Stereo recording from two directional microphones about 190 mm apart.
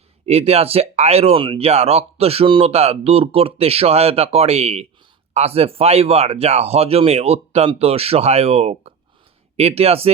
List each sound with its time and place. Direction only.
0.3 s speech: 35° right (ahead or behind)